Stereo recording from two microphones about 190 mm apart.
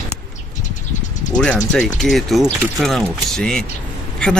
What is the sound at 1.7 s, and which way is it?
Speech, centre (ahead or behind).